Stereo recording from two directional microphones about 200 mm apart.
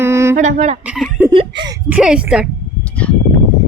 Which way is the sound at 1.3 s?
25° right (ahead or behind).